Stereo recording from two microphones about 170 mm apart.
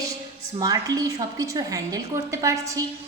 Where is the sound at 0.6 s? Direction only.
20° right (ahead or behind).